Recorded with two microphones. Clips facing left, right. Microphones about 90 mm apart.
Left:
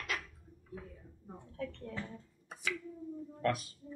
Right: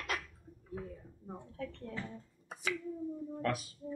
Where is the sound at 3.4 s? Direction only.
Centre (ahead or behind).